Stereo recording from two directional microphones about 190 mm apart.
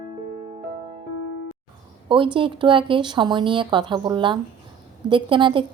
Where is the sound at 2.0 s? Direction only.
25° right (ahead or behind).